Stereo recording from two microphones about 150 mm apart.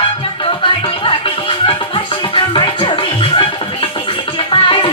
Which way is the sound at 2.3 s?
35° left (ahead or behind).